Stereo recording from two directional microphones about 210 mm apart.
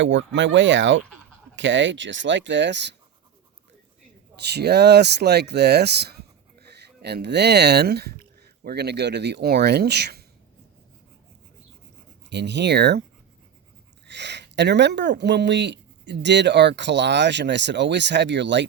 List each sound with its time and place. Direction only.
0.0 s speech: 60° right (ahead or behind)
4.4 s speech: 50° right (ahead or behind)
12.3 s speech: 55° right (ahead or behind)
14.1 s speech: 55° right (ahead or behind)